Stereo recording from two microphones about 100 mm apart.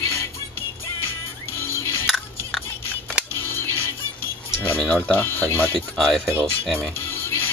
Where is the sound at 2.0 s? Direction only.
Centre (ahead or behind).